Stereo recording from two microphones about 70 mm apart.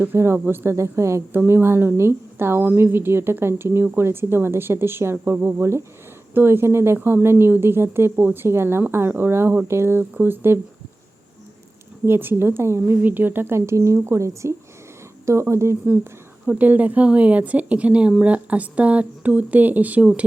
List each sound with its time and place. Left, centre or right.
0.0 s a woman's voice: right
1.3 s a woman's voice: right
12.0 s a woman's voice: right
13.0 s a woman's voice: right
16.5 s speech: right